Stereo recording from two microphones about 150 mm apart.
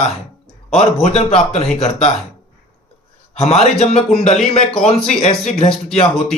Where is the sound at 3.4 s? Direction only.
45° left (ahead or behind).